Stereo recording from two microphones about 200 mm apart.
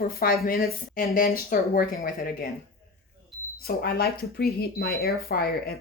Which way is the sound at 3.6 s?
50° left (ahead or behind).